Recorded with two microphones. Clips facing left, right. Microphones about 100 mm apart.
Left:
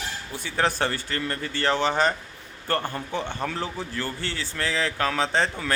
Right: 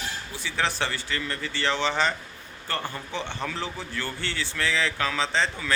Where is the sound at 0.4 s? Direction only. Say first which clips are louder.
Left 3 dB; 45° left (ahead or behind).